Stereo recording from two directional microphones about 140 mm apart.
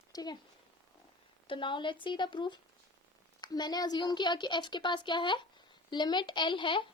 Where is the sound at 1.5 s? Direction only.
35° left (ahead or behind).